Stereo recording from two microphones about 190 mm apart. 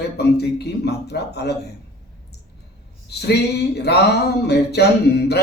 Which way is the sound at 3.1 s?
60° left (ahead or behind).